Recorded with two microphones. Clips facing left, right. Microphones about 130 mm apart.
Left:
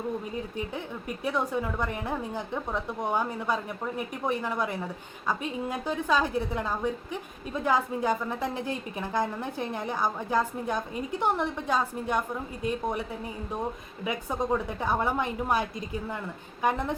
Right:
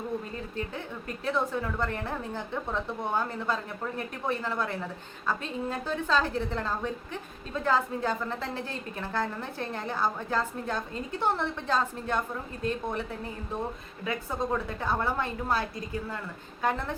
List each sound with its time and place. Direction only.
1.2 s a woman's voice: 15° left (ahead or behind)